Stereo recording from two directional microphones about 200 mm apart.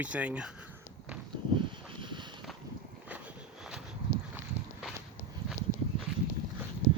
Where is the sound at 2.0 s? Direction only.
25° right (ahead or behind).